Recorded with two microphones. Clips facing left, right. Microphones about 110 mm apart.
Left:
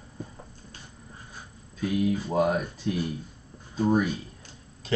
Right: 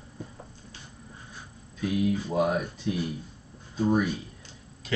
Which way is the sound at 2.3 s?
25° left (ahead or behind).